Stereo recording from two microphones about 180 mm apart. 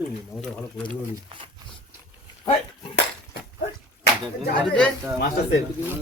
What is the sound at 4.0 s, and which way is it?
Speech, 55° left (ahead or behind).